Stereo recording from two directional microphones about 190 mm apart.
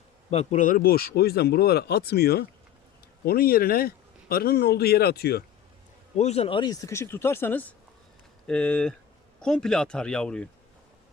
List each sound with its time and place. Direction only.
0.3 s speech: 35° left (ahead or behind); by 5.4 s 55° left (ahead or behind)
6.1 s speech: 35° left (ahead or behind); by 10.5 s 5° left (ahead or behind)